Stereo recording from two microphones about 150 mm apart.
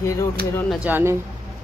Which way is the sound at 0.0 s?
20° left (ahead or behind).